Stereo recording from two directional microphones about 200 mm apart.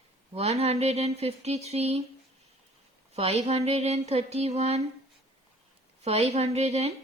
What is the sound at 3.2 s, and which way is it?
Speech, 30° right (ahead or behind).